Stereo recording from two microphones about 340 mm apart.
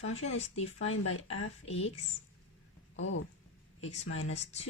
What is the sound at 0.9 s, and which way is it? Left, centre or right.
Speech, left.